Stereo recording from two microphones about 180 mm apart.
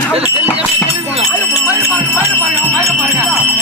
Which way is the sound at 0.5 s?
35° right (ahead or behind).